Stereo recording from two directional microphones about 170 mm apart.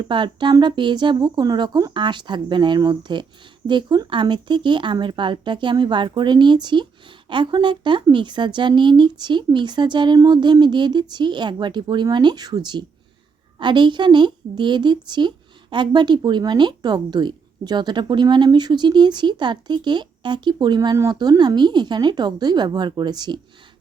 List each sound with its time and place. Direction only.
0.0 s speech: 30° right (ahead or behind)